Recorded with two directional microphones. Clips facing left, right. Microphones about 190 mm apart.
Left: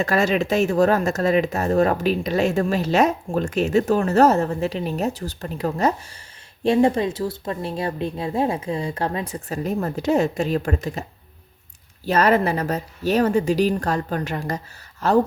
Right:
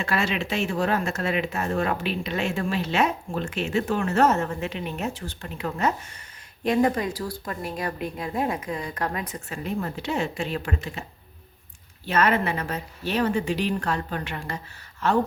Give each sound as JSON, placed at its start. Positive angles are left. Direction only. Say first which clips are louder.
{"t": 0.0, "sound": "speech", "louder": "left 7 dB", "side_deg": 40}
{"t": 9.6, "sound": "speech", "louder": "left 7 dB", "side_deg": 40}
{"t": 12.0, "sound": "speech", "louder": "left 5 dB", "side_deg": 40}